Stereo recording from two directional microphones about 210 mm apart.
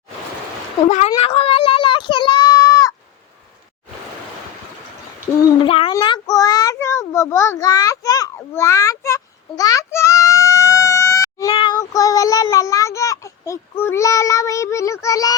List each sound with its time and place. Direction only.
0.9 s a woman's voice: 35° left (ahead or behind)
1.1 s a sound: 25° left (ahead or behind)
5.6 s child singing: 25° left (ahead or behind)